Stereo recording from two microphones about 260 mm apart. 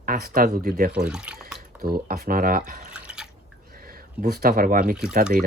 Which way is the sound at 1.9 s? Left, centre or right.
Right.